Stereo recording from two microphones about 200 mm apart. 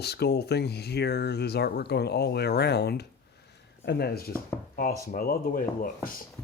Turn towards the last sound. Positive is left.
turn(degrees=50)  # may be behind; listen again after turning